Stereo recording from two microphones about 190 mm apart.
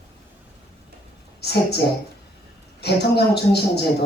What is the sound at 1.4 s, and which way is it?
Speech, 60° left (ahead or behind).